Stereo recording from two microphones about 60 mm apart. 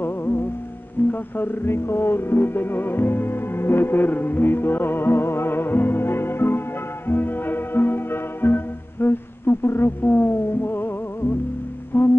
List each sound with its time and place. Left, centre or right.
0.0 s music: left